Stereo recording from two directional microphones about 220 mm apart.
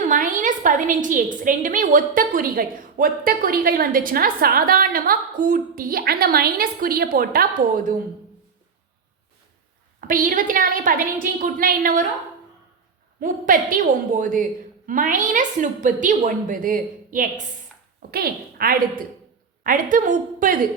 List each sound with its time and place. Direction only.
0.0 s a woman's voice: 35° right (ahead or behind)
10.1 s a woman's voice: 40° right (ahead or behind)
13.1 s a woman's voice: 40° right (ahead or behind)